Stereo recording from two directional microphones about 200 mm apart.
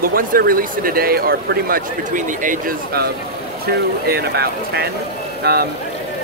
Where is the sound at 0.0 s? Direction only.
45° right (ahead or behind).